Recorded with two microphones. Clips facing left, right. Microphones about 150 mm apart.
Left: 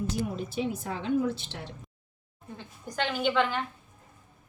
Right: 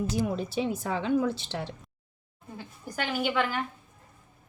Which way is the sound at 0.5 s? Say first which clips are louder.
Right 3 dB; 90° right.